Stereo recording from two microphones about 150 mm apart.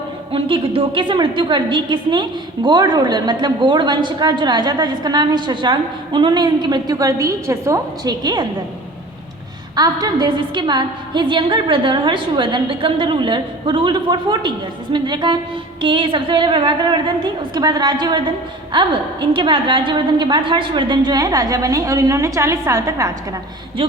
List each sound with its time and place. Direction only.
0.3 s a woman's voice: 35° right (ahead or behind)
9.7 s a woman's voice: 25° right (ahead or behind)